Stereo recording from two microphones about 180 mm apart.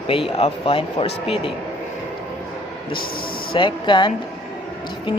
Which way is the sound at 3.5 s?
25° left (ahead or behind).